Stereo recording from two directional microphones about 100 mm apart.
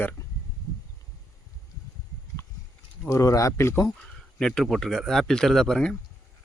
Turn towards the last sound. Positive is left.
turn(degrees=5)  # may be behind; listen again after turning